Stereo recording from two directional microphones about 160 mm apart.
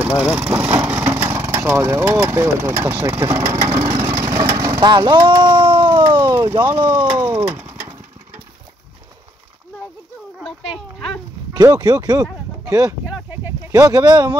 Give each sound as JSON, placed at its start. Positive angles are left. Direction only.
{"t": 0.0, "sound": "speech", "side_deg": -10}
{"t": 4.0, "sound": "a sound", "side_deg": -20}
{"t": 6.3, "sound": "speech", "side_deg": -20}
{"t": 7.4, "sound": "pigeon", "side_deg": -15}
{"t": 11.5, "sound": "speech", "side_deg": -25}
{"t": 13.1, "sound": "a sound", "side_deg": -15}